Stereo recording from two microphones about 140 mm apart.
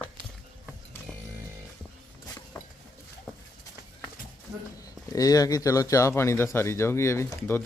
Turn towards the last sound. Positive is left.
turn(degrees=20)  # may be behind; listen again after turning